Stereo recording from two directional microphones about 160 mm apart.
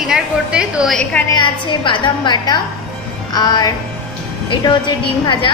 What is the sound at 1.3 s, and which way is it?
A woman's voice, 30° left (ahead or behind).